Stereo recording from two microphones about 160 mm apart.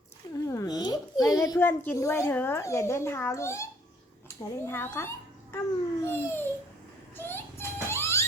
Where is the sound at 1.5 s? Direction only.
15° left (ahead or behind).